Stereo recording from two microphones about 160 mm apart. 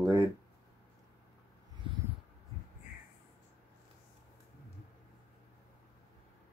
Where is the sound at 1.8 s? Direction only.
30° right (ahead or behind).